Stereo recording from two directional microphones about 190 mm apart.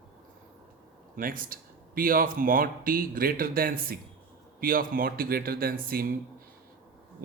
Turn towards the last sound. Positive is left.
turn(degrees=-50)  # may be behind; listen again after turning